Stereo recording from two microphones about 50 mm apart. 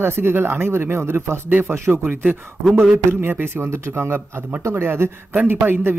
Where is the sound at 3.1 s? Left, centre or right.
Right.